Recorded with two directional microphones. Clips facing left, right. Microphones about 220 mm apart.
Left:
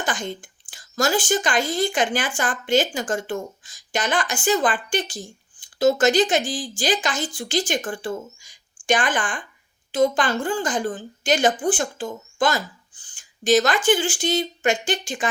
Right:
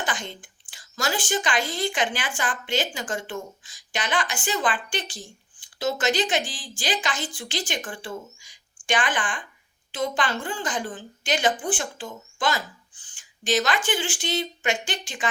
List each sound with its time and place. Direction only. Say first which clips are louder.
0.0 s speech: left 4 dB; 45° left (ahead or behind)